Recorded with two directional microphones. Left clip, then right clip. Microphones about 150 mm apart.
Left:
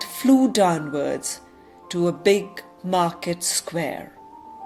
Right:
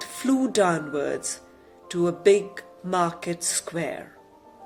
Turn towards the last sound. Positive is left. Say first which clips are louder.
# left 3 dB
turn(degrees=50)  # may be behind; listen again after turning